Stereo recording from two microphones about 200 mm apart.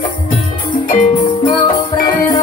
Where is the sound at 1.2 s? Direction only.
25° left (ahead or behind).